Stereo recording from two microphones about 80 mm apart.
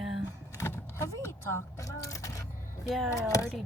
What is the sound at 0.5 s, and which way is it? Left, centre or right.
Speech, left.